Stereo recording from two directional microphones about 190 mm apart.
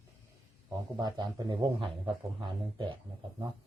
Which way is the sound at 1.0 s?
20° right (ahead or behind).